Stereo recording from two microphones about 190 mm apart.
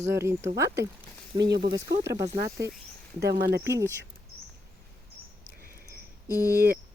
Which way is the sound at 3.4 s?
65° right (ahead or behind).